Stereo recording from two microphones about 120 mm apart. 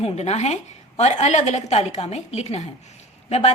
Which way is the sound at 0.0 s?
65° left (ahead or behind).